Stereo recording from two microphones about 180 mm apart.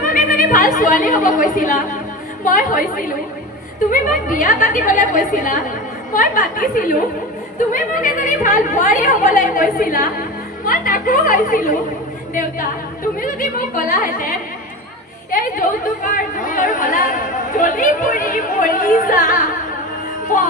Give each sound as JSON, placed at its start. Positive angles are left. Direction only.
{"t": 0.0, "sound": "speech", "side_deg": 50}
{"t": 3.9, "sound": "speech", "side_deg": 45}
{"t": 13.2, "sound": "speech", "side_deg": 50}
{"t": 15.3, "sound": "speech", "side_deg": 50}